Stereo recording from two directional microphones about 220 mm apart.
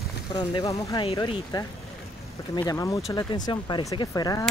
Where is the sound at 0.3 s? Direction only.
20° left (ahead or behind).